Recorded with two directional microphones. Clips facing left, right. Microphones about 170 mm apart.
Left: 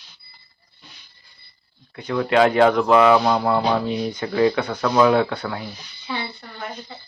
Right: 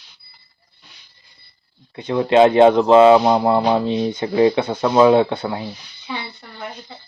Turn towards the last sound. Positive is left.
turn(degrees=-20)  # may be behind; listen again after turning